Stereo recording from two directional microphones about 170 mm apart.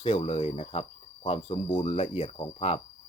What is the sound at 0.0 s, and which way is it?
Speech, 35° left (ahead or behind).